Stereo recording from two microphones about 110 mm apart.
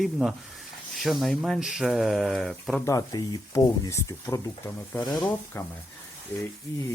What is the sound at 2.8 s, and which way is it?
Speech, 35° left (ahead or behind).